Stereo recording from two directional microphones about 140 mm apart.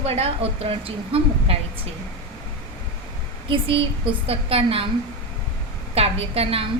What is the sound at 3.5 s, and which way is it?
A woman's voice, 40° right (ahead or behind).